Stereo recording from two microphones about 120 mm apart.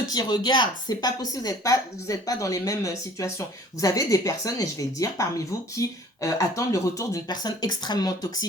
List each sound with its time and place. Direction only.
0.0 s speech: 35° left (ahead or behind)